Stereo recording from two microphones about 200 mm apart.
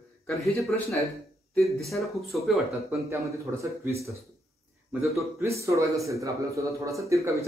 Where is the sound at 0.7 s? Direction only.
15° left (ahead or behind).